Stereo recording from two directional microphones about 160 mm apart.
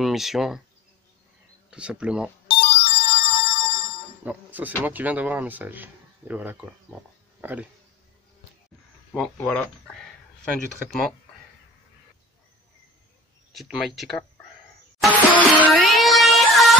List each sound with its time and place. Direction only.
0.0 s speech: centre (ahead or behind)
1.7 s speech: 5° right (ahead or behind)
2.4 s ringtone: 30° left (ahead or behind)
4.2 s speech: 10° right (ahead or behind)
9.1 s speech: 5° left (ahead or behind)
13.5 s speech: centre (ahead or behind)
15.0 s music: 5° left (ahead or behind)